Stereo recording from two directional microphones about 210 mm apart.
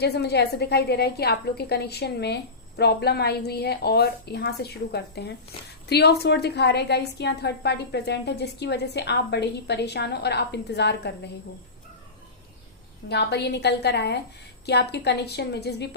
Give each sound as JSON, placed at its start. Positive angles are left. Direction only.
{"t": 0.0, "sound": "a woman's voice", "side_deg": 50}
{"t": 13.1, "sound": "a woman's voice", "side_deg": 55}